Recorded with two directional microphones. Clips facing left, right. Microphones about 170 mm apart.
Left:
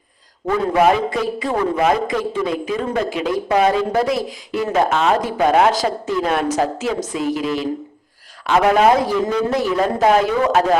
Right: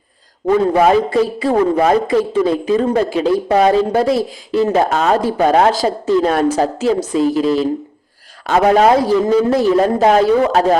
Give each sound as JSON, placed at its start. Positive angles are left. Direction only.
{"t": 0.7, "sound": "a man's voice", "side_deg": -35}